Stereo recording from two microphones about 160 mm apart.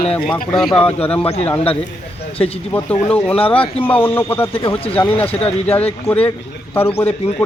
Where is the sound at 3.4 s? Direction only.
35° left (ahead or behind).